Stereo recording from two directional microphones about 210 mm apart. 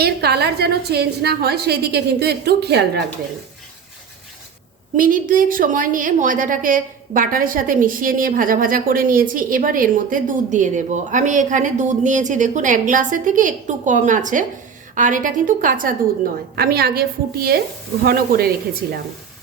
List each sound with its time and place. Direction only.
0.0 s a woman's voice: 50° right (ahead or behind)
4.9 s a woman's voice: 40° right (ahead or behind)